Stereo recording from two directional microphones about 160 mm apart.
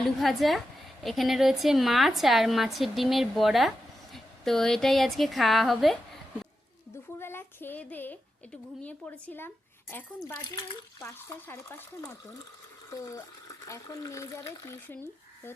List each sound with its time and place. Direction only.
0.2 s a woman's voice: centre (ahead or behind)
7.2 s speech: 15° left (ahead or behind)
11.0 s speech: 15° left (ahead or behind)
12.9 s speech: 20° left (ahead or behind)